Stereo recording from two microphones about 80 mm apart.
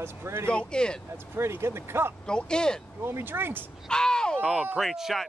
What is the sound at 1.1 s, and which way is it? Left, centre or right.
Speech, right.